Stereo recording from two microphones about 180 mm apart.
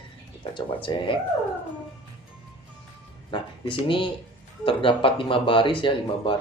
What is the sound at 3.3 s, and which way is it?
Speech, 25° left (ahead or behind).